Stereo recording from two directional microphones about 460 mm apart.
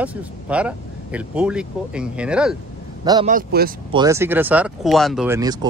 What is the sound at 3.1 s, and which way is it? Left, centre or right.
Speech, centre.